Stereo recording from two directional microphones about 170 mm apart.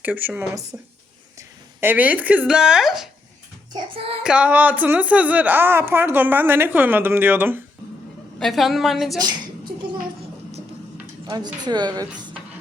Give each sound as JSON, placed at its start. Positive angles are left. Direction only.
{"t": 0.0, "sound": "speech", "side_deg": -10}
{"t": 4.2, "sound": "speech", "side_deg": -5}
{"t": 8.4, "sound": "a woman's voice", "side_deg": 0}
{"t": 11.3, "sound": "a woman's voice", "side_deg": -25}